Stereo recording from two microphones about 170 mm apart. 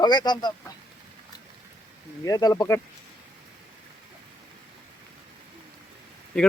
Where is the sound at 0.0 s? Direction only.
25° left (ahead or behind).